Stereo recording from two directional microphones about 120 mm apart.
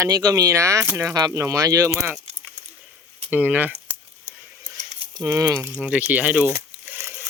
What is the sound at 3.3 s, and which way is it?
Speech, 15° right (ahead or behind).